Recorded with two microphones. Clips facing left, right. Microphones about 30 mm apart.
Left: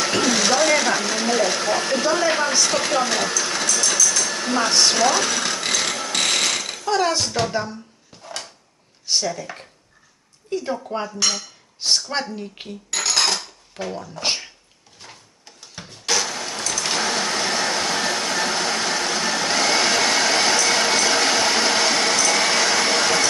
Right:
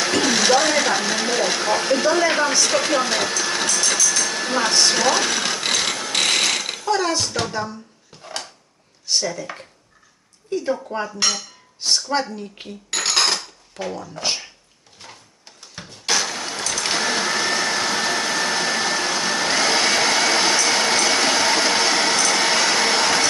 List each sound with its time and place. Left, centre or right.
0.2 s sewing machine: centre
4.0 s a sound: centre
5.1 s mechanisms: centre
6.8 s speech: centre
9.2 s speech: centre
10.6 s speech: centre
12.1 s speech: centre
12.9 s dishes: centre
13.8 s speech: centre
15.7 s a sound: centre
16.8 s vacuum cleaner: centre